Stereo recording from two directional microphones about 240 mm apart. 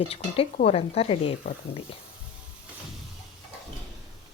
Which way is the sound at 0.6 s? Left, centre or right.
Left.